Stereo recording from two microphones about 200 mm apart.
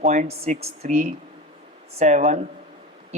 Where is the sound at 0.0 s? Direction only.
35° right (ahead or behind).